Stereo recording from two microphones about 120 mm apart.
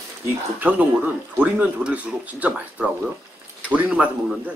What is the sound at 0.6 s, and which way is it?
Speech, 10° right (ahead or behind).